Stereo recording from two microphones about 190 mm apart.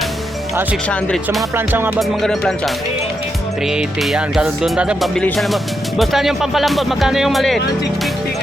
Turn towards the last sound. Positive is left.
turn(degrees=0)  # may be behind; listen again after turning